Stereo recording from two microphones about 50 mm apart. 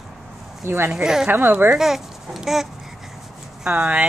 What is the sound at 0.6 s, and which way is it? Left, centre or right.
Speech, right.